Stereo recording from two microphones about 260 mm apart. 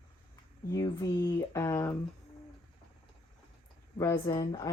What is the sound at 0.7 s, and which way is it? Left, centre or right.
Speech, centre.